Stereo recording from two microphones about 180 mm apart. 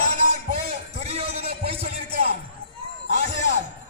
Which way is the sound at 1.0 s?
35° right (ahead or behind).